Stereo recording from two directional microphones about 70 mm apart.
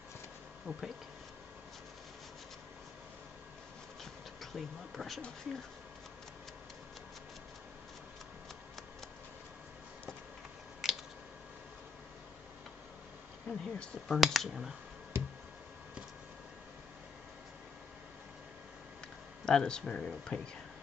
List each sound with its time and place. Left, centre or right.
0.7 s speech: centre
4.0 s a sound: centre
10.8 s chewing: centre
13.5 s speech: centre
19.4 s speech: centre